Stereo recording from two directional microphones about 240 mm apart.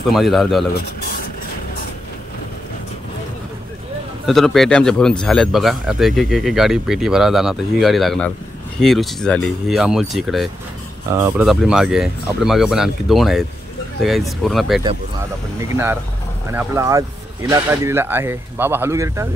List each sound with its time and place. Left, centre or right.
0.1 s speech: centre
4.3 s speech: centre